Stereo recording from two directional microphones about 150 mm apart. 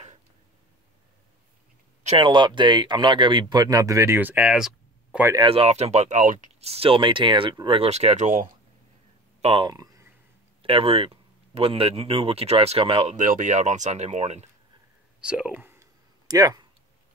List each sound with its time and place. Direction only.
2.1 s speech: 30° right (ahead or behind); by 5.2 s 5° right (ahead or behind)
5.2 s speech: 20° right (ahead or behind)
5.5 s speech: 45° right (ahead or behind)
6.6 s speech: 40° right (ahead or behind)
9.4 s speech: 35° right (ahead or behind)
10.6 s speech: 40° right (ahead or behind)
13.1 s speech: 60° right (ahead or behind)
15.1 s a sound: 5° right (ahead or behind); by 16.6 s 25° right (ahead or behind)